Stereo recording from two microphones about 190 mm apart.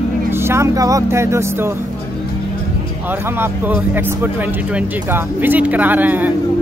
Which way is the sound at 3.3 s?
10° right (ahead or behind).